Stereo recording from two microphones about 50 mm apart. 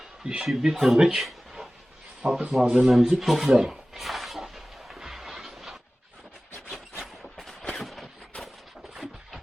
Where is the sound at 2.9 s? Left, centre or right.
Centre.